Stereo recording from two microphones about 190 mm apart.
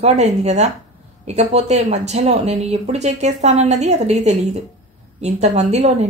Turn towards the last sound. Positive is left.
turn(degrees=-35)  # may be behind; listen again after turning